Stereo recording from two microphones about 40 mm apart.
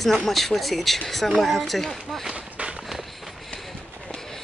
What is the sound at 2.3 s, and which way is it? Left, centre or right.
Run, right.